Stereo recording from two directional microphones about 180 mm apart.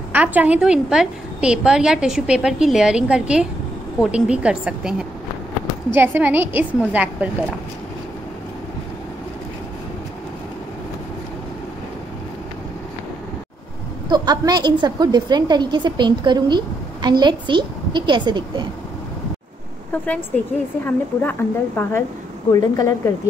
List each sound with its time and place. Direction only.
0.1 s a woman's voice: 10° right (ahead or behind)
14.0 s a woman's voice: 25° right (ahead or behind)
20.8 s a woman's voice: 10° left (ahead or behind)